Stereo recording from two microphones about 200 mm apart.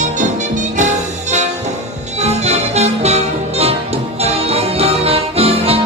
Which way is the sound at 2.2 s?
35° right (ahead or behind).